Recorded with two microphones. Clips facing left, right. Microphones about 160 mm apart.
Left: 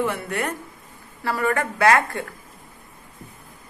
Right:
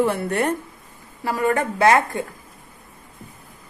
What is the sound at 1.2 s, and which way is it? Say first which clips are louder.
A woman's voice: right 2 dB; 20° right (ahead or behind).